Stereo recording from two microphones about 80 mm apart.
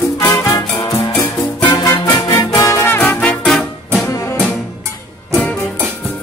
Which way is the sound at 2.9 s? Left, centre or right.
Left.